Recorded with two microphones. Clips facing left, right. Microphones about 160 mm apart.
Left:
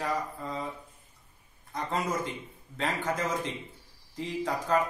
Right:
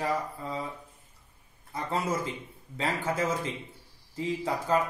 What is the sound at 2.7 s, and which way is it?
A man's voice, 10° right (ahead or behind).